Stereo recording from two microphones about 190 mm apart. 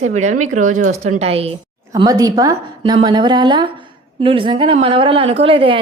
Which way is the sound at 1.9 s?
20° right (ahead or behind).